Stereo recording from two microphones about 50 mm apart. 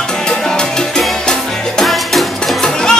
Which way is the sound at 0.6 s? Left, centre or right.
Centre.